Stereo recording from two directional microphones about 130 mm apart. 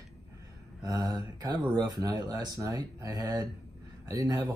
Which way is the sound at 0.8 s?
30° right (ahead or behind).